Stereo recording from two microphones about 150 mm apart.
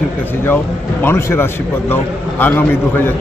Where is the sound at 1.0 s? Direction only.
15° left (ahead or behind).